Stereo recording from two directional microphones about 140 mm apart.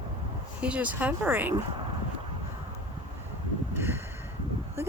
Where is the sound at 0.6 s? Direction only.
10° right (ahead or behind).